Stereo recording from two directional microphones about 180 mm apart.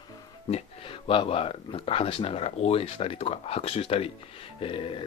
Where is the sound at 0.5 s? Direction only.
35° left (ahead or behind).